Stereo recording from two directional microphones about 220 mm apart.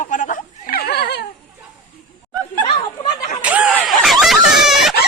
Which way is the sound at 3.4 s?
5° right (ahead or behind).